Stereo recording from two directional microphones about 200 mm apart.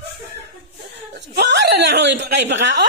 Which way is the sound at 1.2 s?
60° right (ahead or behind).